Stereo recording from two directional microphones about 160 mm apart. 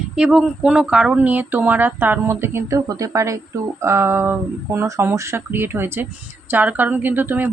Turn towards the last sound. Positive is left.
turn(degrees=-10)  # may be behind; listen again after turning